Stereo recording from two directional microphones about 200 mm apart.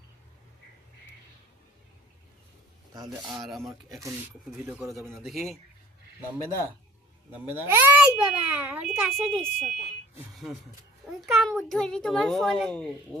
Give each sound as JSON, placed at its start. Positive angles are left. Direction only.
{"t": 2.9, "sound": "speech", "side_deg": -20}
{"t": 3.2, "sound": "a child's voice", "side_deg": 0}
{"t": 3.7, "sound": "a child's voice", "side_deg": -15}
{"t": 4.6, "sound": "a child's voice", "side_deg": -5}
{"t": 7.3, "sound": "a child's voice", "side_deg": -10}